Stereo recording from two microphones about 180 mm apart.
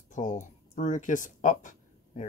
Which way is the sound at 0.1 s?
45° left (ahead or behind).